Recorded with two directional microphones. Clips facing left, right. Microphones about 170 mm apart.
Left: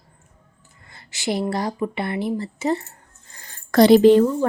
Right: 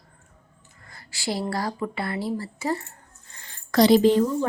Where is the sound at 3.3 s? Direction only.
40° left (ahead or behind); by 4.3 s 65° left (ahead or behind).